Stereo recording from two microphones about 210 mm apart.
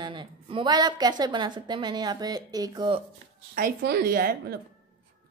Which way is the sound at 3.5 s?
45° right (ahead or behind).